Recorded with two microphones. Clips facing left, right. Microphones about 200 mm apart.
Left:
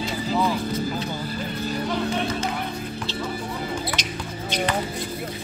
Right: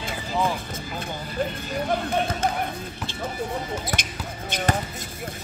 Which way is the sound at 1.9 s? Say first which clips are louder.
Right 2 dB; 50° right (ahead or behind).